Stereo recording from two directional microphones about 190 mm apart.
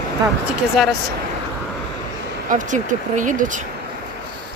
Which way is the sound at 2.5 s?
40° right (ahead or behind).